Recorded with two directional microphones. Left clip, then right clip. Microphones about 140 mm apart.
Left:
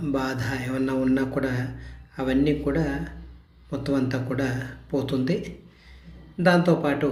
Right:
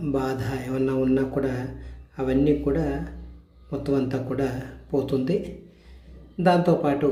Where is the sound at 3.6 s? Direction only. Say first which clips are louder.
Right 1 dB; 40° right (ahead or behind).